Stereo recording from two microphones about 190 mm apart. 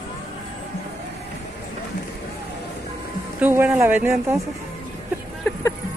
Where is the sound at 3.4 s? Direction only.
10° right (ahead or behind).